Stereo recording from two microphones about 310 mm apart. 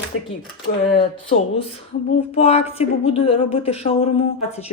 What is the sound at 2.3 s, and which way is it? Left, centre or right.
Speech, centre.